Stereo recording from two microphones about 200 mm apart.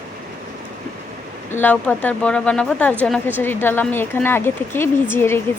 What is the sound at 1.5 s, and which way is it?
Speech, 10° left (ahead or behind).